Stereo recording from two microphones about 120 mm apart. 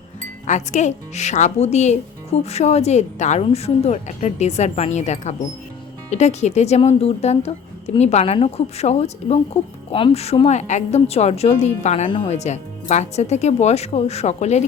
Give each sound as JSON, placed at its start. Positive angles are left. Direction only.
{"t": 0.4, "sound": "speech", "side_deg": 80}